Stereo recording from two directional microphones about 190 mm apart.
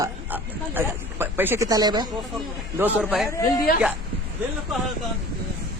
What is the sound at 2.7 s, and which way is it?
Speech, 10° right (ahead or behind).